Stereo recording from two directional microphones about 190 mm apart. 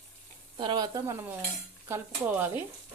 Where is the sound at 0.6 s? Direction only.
25° right (ahead or behind).